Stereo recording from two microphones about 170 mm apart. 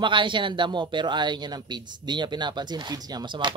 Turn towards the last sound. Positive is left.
turn(degrees=-25)  # may be behind; listen again after turning